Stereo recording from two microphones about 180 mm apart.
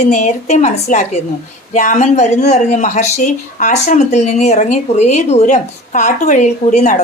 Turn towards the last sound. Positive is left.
turn(degrees=40)  # may be behind; listen again after turning